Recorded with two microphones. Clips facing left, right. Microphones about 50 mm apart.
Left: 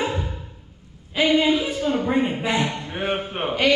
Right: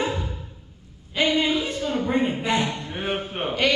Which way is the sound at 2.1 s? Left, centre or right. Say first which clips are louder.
Left 1 dB; centre.